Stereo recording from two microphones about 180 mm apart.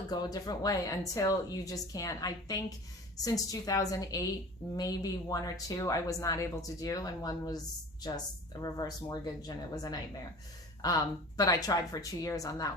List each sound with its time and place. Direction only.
0.1 s speech: 20° left (ahead or behind)